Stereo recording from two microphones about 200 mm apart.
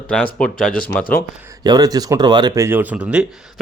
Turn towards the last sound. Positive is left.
turn(degrees=-5)  # may be behind; listen again after turning